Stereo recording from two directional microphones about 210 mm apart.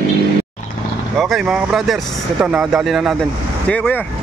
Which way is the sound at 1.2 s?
Centre (ahead or behind).